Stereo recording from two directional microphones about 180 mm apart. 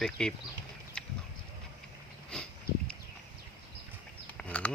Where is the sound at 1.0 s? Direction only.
5° left (ahead or behind).